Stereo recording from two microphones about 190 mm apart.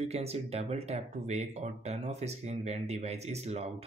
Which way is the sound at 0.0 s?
35° right (ahead or behind).